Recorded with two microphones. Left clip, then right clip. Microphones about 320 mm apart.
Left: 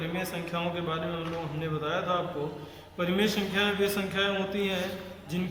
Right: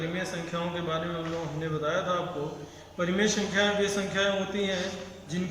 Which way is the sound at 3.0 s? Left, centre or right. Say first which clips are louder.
Right 1 dB; centre.